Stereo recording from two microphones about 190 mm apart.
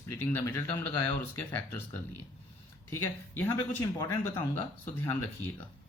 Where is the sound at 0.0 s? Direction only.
15° left (ahead or behind).